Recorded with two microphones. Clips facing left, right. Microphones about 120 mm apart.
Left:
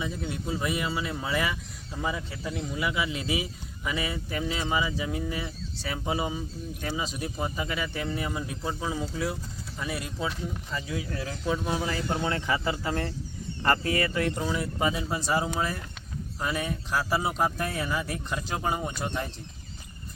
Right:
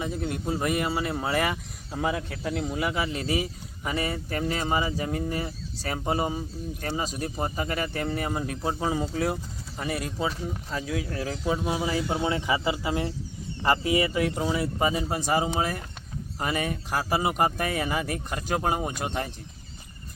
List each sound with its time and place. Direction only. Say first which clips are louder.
0.0 s speech: right 3 dB; 55° right (ahead or behind)
11.3 s speech: right 1 dB; 10° right (ahead or behind)
14.9 s speech: right 2 dB; 55° right (ahead or behind)